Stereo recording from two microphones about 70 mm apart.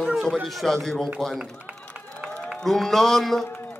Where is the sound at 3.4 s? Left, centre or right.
Left.